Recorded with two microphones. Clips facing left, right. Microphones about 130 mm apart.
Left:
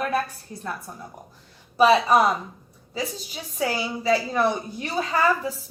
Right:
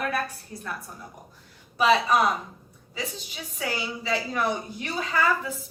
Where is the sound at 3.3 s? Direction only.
35° left (ahead or behind).